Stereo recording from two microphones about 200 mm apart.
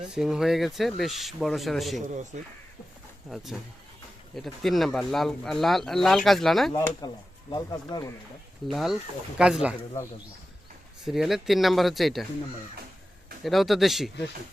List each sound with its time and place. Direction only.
0.2 s speech: centre (ahead or behind)
3.2 s speech: centre (ahead or behind)
6.7 s speech: 15° left (ahead or behind)
8.6 s speech: centre (ahead or behind)
11.0 s speech: centre (ahead or behind)
13.4 s speech: centre (ahead or behind)